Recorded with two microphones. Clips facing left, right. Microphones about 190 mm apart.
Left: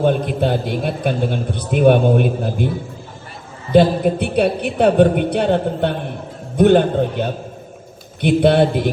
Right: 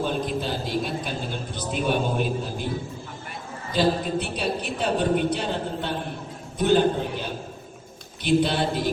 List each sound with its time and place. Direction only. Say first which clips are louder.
0.0 s a man's voice: left 9 dB; 60° left (ahead or behind)
3.7 s a man's voice: left 10 dB; 60° left (ahead or behind)